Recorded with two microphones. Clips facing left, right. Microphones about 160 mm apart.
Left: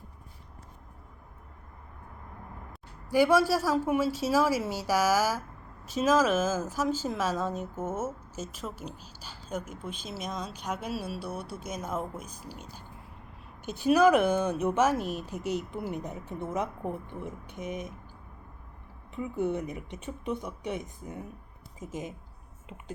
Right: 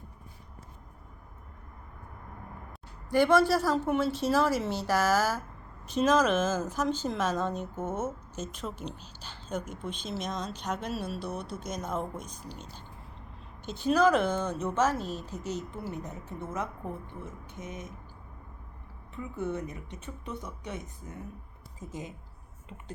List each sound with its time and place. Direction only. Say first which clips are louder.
3.1 s speech: even; 10° left (ahead or behind)
19.1 s speech: left 4 dB; 15° left (ahead or behind)